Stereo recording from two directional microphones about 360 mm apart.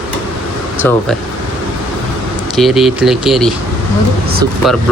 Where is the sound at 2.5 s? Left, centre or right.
Centre.